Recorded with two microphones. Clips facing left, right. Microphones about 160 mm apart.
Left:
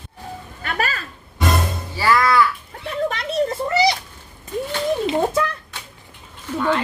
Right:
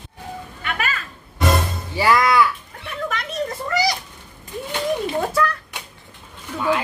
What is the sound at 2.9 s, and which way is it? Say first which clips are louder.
Children playing: left 4 dB; 30° left (ahead or behind).